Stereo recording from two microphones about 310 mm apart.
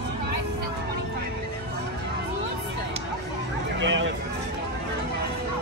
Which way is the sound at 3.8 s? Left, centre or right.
Right.